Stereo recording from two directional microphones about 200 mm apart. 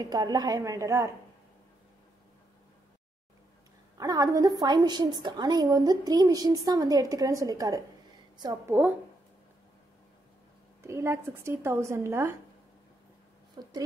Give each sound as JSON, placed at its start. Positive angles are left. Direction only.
{"t": 0.0, "sound": "speech", "side_deg": -20}
{"t": 4.0, "sound": "a woman's voice", "side_deg": -20}
{"t": 10.8, "sound": "speech", "side_deg": -15}
{"t": 13.6, "sound": "speech", "side_deg": -20}